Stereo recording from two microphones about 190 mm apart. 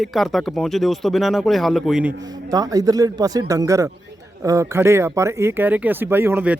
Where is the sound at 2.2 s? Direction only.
20° right (ahead or behind).